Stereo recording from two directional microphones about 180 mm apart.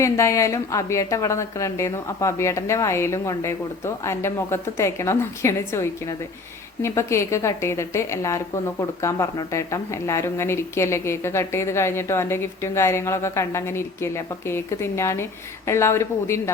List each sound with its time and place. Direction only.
0.0 s a woman's voice: 15° left (ahead or behind)